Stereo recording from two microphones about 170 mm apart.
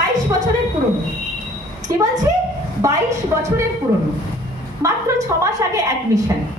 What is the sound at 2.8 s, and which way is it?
Speech, 15° right (ahead or behind).